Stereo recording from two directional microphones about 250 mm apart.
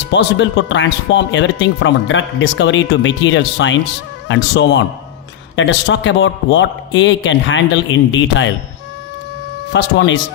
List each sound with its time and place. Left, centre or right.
0.1 s speech: left
9.7 s speech: left